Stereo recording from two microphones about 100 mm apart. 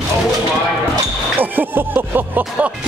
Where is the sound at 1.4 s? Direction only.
20° right (ahead or behind).